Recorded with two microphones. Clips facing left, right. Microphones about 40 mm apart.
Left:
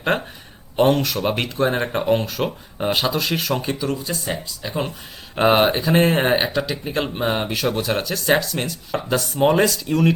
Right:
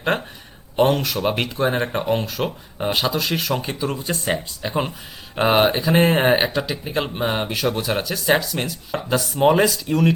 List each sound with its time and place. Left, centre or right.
0.1 s speech: centre
3.9 s speech: right
4.6 s speech: centre
5.3 s speech: centre